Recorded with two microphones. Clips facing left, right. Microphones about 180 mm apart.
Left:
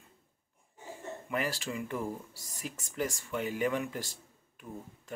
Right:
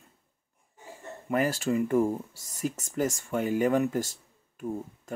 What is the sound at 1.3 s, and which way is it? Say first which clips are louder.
Speech: right 9 dB; 45° right (ahead or behind).